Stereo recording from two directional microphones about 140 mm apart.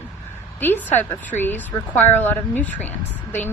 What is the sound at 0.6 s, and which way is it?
A woman's voice, 15° left (ahead or behind).